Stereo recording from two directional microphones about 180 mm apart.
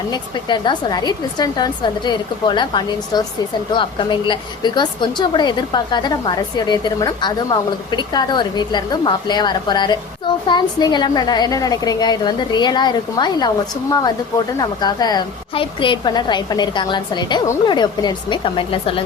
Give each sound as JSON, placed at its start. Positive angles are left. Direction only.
{"t": 0.1, "sound": "a woman's voice", "side_deg": 25}